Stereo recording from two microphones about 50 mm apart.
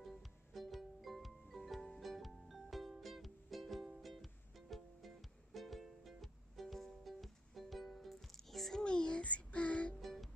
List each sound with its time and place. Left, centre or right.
0.0 s music: centre
8.8 s child singing: centre